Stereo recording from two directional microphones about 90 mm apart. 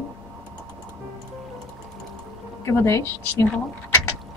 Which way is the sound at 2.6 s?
30° left (ahead or behind).